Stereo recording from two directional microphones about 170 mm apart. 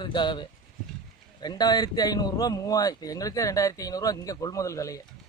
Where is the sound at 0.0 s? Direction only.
25° left (ahead or behind).